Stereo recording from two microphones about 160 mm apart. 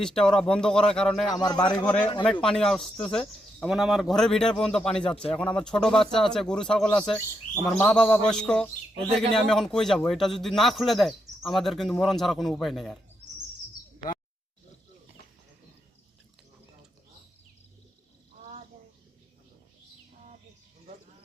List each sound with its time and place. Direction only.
0.0 s speech: 5° left (ahead or behind)
1.4 s a man's voice: 25° left (ahead or behind)
2.2 s speech: 5° left (ahead or behind)